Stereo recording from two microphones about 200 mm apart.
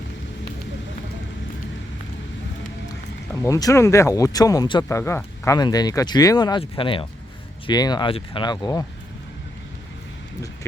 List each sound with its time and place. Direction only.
3.4 s speech: 15° left (ahead or behind)